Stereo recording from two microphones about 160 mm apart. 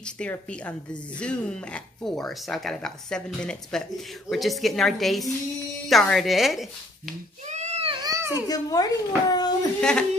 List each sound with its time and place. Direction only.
0.0 s speech: 5° left (ahead or behind)
7.4 s a sound: 45° right (ahead or behind)
8.0 s baby cry: 20° right (ahead or behind)
8.3 s a child's voice: 25° left (ahead or behind)
9.8 s speech: 5° left (ahead or behind)